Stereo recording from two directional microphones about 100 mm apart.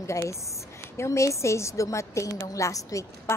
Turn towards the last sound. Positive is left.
turn(degrees=30)  # may be behind; listen again after turning